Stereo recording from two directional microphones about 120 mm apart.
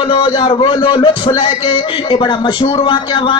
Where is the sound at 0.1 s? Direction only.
45° left (ahead or behind).